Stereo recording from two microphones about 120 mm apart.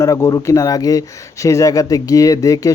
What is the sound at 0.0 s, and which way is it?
Speech, 25° left (ahead or behind).